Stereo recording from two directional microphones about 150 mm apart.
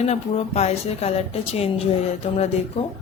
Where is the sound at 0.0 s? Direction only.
45° left (ahead or behind).